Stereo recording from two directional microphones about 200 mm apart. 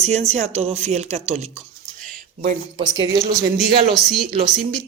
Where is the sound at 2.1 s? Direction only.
35° right (ahead or behind).